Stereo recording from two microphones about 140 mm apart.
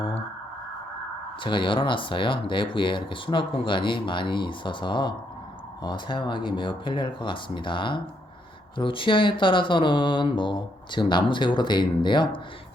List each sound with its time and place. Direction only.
1.4 s speech: 35° left (ahead or behind)